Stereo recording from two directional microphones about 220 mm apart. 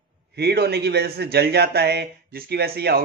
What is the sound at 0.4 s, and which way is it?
Speech, 45° right (ahead or behind).